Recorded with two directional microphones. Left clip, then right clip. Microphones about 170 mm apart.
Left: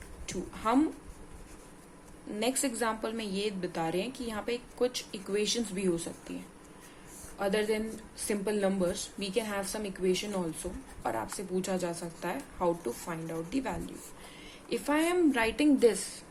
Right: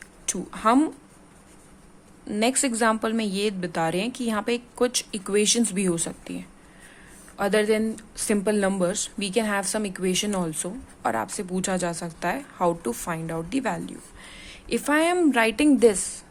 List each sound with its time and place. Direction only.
0.3 s speech: 45° right (ahead or behind)
2.3 s speech: 45° right (ahead or behind)